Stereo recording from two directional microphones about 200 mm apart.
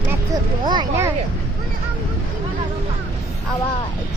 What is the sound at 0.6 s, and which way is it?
Speech, 20° right (ahead or behind).